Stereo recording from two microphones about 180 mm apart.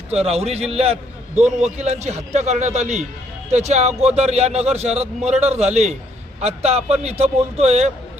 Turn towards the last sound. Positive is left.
turn(degrees=-35)  # may be behind; listen again after turning